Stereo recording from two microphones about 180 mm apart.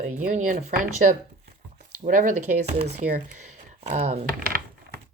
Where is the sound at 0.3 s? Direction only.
45° right (ahead or behind).